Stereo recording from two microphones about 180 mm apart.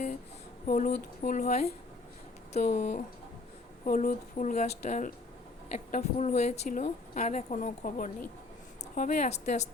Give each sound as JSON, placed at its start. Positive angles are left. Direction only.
{"t": 0.7, "sound": "a woman's voice", "side_deg": 40}